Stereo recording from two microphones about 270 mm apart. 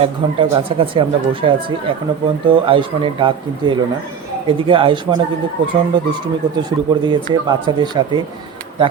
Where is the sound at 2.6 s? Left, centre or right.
Centre.